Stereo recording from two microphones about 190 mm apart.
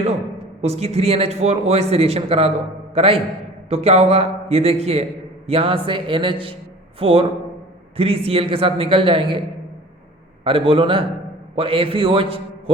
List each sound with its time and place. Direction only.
0.0 s a man's voice: 35° right (ahead or behind)
10.4 s a man's voice: 30° right (ahead or behind)